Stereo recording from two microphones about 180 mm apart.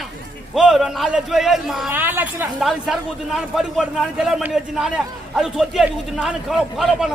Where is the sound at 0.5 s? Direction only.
Centre (ahead or behind).